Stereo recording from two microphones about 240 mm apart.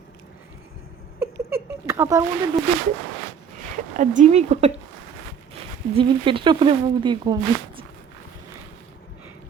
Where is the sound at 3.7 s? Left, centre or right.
Right.